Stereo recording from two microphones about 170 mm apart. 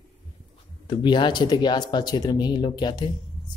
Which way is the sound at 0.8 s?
25° left (ahead or behind).